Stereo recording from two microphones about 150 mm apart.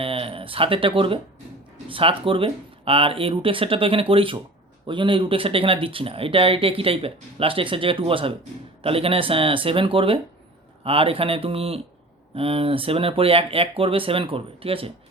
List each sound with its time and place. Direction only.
0.0 s speech: 40° right (ahead or behind)